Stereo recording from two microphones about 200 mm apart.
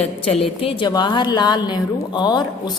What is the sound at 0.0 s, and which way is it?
A woman's voice, 30° left (ahead or behind).